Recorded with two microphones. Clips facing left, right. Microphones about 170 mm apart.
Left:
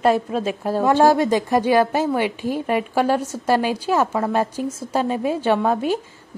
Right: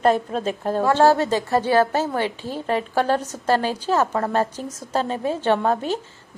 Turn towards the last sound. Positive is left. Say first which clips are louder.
# left 2 dB
turn(degrees=10)  # may be behind; listen again after turning